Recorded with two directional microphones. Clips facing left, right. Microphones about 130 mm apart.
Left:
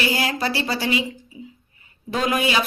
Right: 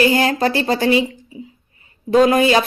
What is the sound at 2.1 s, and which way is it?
Speech, 35° right (ahead or behind).